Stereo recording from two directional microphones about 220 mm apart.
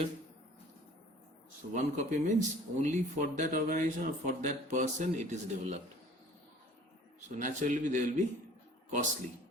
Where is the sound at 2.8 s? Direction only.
35° right (ahead or behind).